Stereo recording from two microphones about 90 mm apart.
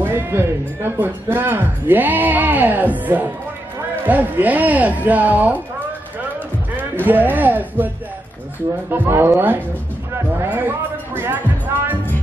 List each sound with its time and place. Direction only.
0.0 s a man's voice: 25° right (ahead or behind)
7.1 s speech: 20° right (ahead or behind)
8.9 s speech: 25° right (ahead or behind)